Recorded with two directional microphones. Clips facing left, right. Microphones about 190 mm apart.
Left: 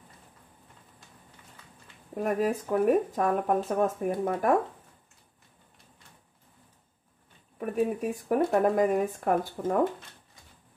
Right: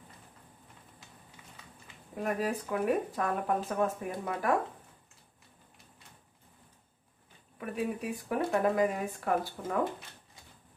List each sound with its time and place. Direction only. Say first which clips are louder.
2.2 s speech: left 5 dB; 45° left (ahead or behind)
7.5 s speech: left 6 dB; 45° left (ahead or behind)